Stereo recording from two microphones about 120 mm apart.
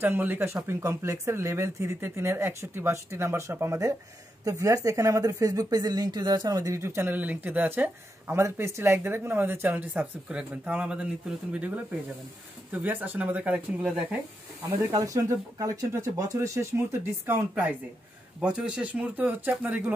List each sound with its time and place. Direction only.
0.0 s speech: 15° right (ahead or behind)
14.8 s speech: 30° right (ahead or behind)